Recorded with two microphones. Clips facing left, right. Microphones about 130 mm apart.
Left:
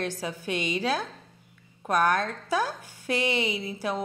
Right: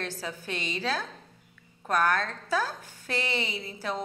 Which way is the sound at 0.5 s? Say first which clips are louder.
Left 4 dB; 15° left (ahead or behind).